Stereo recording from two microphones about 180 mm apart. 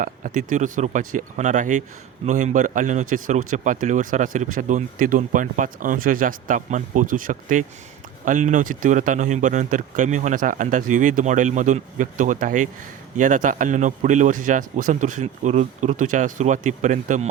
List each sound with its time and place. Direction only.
0.0 s speech: 45° right (ahead or behind)